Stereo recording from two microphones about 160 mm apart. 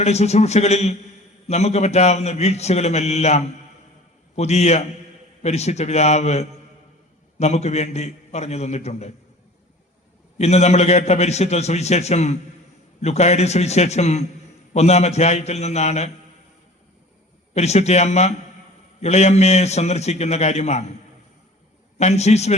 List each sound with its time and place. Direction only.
0.0 s a man's voice: 45° left (ahead or behind)
10.3 s a man's voice: 45° left (ahead or behind)
17.5 s a man's voice: 45° left (ahead or behind)
21.9 s a man's voice: 45° left (ahead or behind)